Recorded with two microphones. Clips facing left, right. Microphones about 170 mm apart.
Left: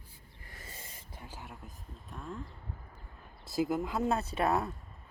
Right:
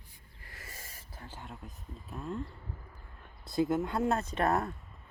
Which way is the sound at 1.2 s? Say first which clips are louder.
Right 2 dB; 10° left (ahead or behind).